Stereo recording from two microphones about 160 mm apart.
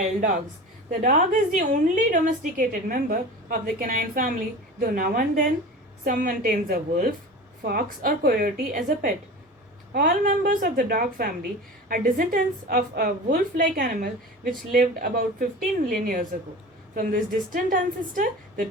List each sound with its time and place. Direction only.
0.9 s a woman's voice: 55° right (ahead or behind)
16.9 s a woman's voice: 60° right (ahead or behind)